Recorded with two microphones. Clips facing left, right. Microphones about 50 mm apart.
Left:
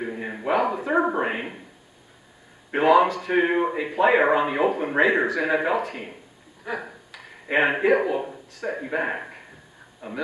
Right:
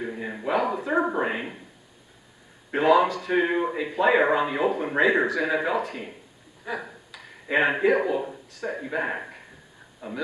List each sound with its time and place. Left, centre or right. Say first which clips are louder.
0.2 s a sound: left 1 dB; left
0.5 s a man's voice: left 2 dB; left
2.7 s a man's voice: left 2 dB; left
10.0 s speech: even; left